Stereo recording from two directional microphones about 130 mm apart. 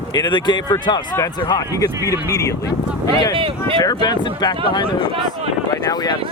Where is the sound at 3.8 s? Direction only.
30° left (ahead or behind).